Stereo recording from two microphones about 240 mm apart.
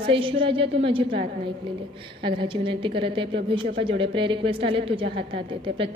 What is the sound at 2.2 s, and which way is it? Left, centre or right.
A woman's voice, right.